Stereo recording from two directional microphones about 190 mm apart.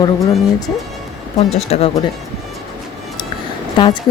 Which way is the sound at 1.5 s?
35° left (ahead or behind).